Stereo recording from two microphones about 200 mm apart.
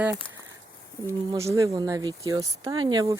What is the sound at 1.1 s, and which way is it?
Speech, 15° right (ahead or behind).